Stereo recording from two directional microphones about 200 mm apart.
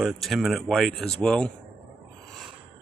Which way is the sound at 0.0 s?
Centre (ahead or behind).